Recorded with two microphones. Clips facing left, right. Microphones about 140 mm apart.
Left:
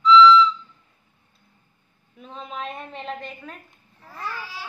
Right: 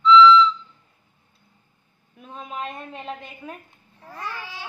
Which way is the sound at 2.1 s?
10° right (ahead or behind).